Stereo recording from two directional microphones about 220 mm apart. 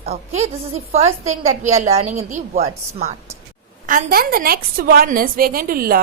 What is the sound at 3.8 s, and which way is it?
A woman's voice, 40° right (ahead or behind).